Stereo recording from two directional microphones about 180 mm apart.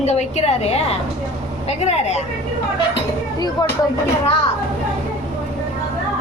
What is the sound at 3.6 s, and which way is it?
Speech, 20° left (ahead or behind).